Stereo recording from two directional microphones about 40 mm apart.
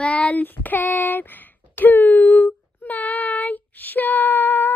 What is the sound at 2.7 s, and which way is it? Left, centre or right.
Child singing, left.